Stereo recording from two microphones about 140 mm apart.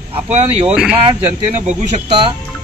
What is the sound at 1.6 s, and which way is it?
Speech, 55° right (ahead or behind).